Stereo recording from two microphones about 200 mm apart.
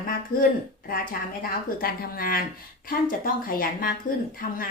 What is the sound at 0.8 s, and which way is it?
A woman's voice, 45° left (ahead or behind).